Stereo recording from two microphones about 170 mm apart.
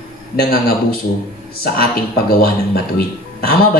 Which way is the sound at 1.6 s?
65° left (ahead or behind).